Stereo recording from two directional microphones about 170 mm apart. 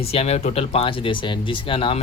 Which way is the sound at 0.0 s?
35° left (ahead or behind).